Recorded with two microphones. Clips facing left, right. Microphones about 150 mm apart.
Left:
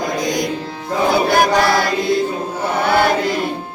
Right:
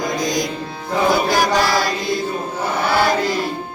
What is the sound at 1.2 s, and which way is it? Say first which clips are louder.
Chant: left 3 dB; 55° left (ahead or behind).